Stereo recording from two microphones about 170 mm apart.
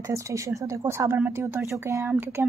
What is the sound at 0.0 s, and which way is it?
Speech, 20° right (ahead or behind).